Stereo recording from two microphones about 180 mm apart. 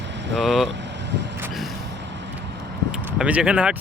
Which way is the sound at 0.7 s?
75° right (ahead or behind).